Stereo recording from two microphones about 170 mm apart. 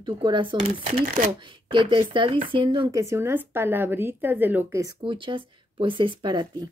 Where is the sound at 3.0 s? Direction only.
15° right (ahead or behind).